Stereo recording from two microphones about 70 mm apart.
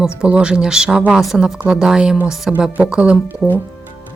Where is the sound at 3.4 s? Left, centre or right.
Centre.